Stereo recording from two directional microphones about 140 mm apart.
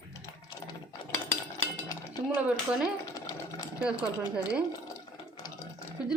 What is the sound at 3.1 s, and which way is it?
Sewing machine, 30° left (ahead or behind).